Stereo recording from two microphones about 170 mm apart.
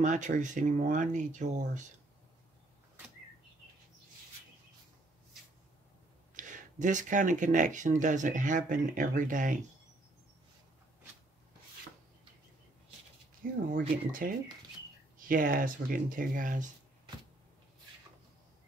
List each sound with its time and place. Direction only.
0.0 s speech: 45° right (ahead or behind)
6.3 s speech: 45° right (ahead or behind)
13.4 s speech: 50° right (ahead or behind)